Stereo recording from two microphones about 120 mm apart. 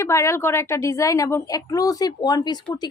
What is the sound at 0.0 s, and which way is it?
A woman's voice, 25° left (ahead or behind).